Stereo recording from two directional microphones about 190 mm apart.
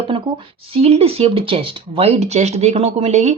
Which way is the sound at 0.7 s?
35° right (ahead or behind).